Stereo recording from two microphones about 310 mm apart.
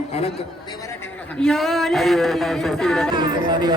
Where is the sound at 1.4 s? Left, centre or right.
Centre.